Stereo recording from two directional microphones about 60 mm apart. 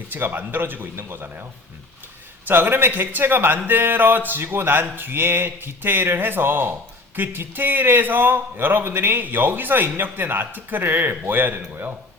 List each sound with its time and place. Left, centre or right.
0.1 s a man's voice: right
2.5 s a man's voice: right